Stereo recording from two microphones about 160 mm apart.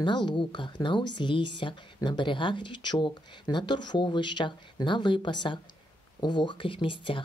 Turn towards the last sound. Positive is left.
turn(degrees=30)  # may be behind; listen again after turning